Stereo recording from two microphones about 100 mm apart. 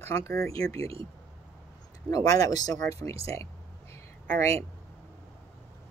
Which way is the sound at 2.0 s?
35° left (ahead or behind).